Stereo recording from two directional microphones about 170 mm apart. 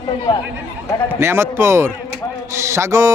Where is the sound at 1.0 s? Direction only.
15° right (ahead or behind).